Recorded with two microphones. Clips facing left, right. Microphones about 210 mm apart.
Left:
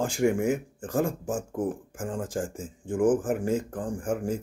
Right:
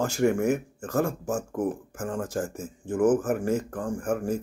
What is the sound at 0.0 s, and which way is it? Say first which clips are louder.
Speech: right 1 dB; 15° left (ahead or behind).